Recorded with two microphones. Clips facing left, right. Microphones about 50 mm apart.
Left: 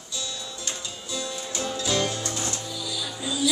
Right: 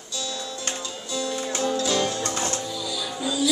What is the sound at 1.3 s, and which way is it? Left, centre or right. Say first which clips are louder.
Music: right 9 dB; right.